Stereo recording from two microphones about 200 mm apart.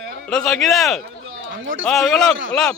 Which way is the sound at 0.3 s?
5° left (ahead or behind).